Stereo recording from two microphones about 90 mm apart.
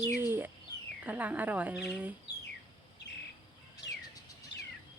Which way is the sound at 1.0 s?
15° right (ahead or behind).